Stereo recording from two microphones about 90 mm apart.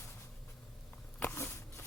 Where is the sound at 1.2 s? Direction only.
25° left (ahead or behind).